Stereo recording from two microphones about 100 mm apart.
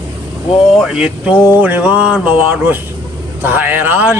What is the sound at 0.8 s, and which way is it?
A man's voice, 5° right (ahead or behind).